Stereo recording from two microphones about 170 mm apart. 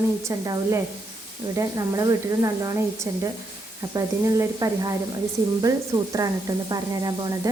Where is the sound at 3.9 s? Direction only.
20° right (ahead or behind).